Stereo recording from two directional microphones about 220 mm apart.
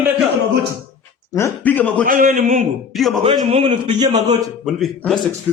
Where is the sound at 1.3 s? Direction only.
10° left (ahead or behind).